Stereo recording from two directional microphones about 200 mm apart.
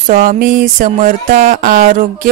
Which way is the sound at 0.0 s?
40° right (ahead or behind).